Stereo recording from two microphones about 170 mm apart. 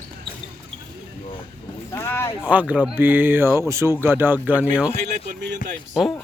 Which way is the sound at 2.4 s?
10° right (ahead or behind).